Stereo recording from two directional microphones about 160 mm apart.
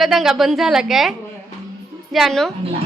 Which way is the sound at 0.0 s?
Centre (ahead or behind).